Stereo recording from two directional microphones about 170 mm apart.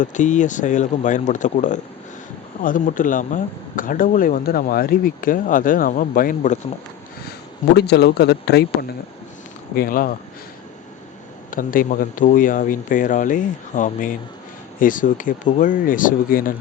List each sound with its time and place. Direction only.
0.0 s speech: 45° left (ahead or behind)
7.8 s speech: 75° left (ahead or behind)
9.7 s speech: 55° left (ahead or behind)
11.5 s speech: 55° left (ahead or behind)